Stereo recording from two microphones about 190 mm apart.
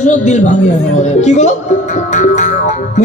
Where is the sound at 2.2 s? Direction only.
40° left (ahead or behind).